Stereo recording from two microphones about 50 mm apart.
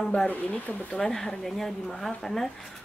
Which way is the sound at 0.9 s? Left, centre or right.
Centre.